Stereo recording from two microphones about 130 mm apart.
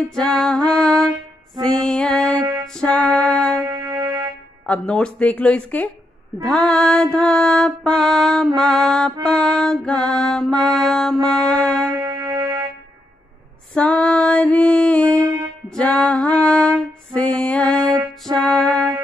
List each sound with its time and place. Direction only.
0.1 s music: 5° left (ahead or behind)
3.6 s music: 20° right (ahead or behind)
4.6 s music: 5° left (ahead or behind)
12.0 s music: 20° right (ahead or behind)
13.7 s music: 10° left (ahead or behind)